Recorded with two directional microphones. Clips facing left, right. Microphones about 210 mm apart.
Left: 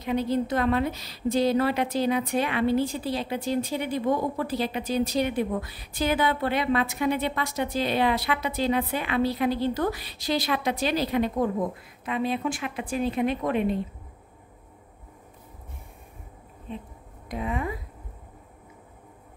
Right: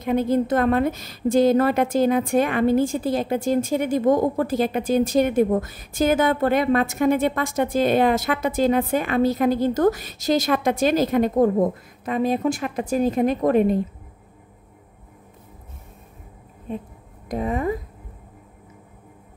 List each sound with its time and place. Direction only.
0.0 s a woman's voice: 50° right (ahead or behind)
16.7 s a woman's voice: 45° right (ahead or behind)